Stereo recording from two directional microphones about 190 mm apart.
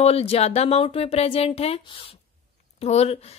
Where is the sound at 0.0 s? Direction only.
30° left (ahead or behind).